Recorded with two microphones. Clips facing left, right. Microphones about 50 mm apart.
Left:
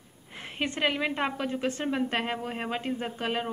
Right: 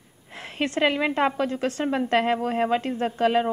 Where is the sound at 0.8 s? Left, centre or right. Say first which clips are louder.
Right 6 dB; centre.